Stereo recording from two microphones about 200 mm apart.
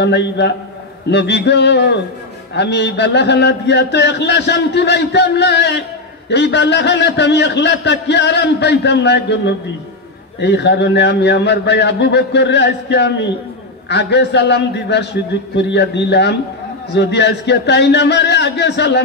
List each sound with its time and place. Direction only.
0.0 s a man's voice: 60° left (ahead or behind)